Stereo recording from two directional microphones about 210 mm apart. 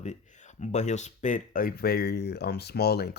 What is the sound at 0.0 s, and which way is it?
Speech, 35° left (ahead or behind).